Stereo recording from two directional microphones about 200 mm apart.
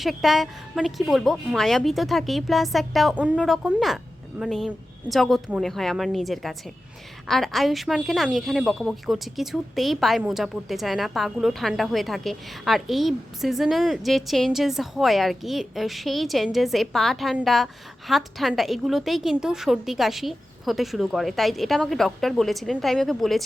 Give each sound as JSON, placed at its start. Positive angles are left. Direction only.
{"t": 0.0, "sound": "a woman's voice", "side_deg": 0}